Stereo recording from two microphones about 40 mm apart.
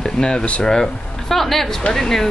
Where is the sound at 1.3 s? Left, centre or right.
Centre.